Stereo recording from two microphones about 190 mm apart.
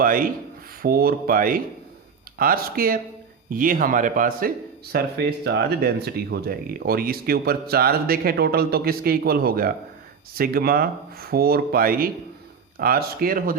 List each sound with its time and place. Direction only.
0.0 s a man's voice: 50° right (ahead or behind)